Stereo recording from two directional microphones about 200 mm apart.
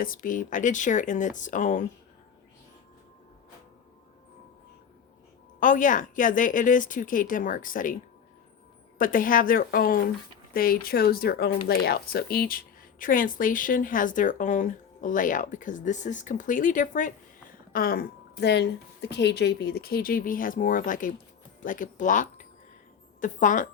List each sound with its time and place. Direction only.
0.0 s speech: 45° left (ahead or behind)
5.5 s speech: 40° left (ahead or behind)
9.0 s a woman's voice: 45° left (ahead or behind)